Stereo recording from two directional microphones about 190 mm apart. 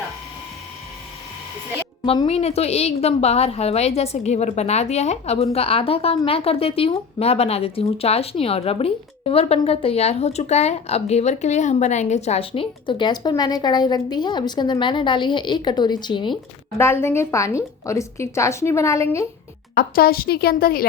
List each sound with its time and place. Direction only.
2.0 s a woman's voice: 30° left (ahead or behind)
16.7 s a woman's voice: 15° left (ahead or behind)
19.7 s speech: 50° left (ahead or behind)